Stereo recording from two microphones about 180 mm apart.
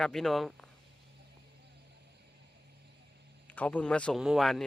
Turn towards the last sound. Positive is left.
turn(degrees=0)  # may be behind; listen again after turning